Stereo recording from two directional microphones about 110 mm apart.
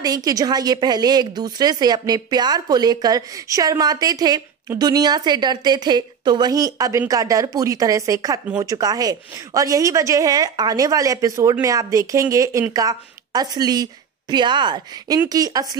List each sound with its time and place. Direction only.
0.0 s a woman's voice: 35° right (ahead or behind)